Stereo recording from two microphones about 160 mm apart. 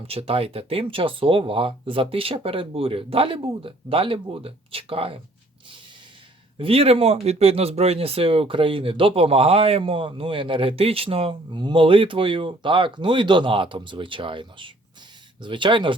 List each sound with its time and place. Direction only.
0.1 s speech: 35° right (ahead or behind)
6.6 s speech: 35° right (ahead or behind)